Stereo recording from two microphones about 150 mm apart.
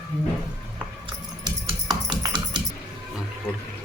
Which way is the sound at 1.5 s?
30° right (ahead or behind).